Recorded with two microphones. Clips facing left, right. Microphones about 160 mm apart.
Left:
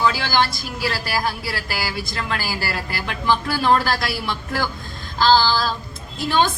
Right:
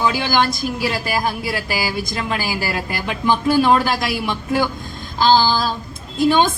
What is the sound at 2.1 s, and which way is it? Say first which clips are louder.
A woman's voice: right 3 dB; 15° right (ahead or behind).